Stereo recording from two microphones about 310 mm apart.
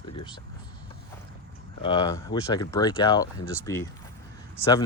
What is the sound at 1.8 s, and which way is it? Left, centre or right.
Speech, centre.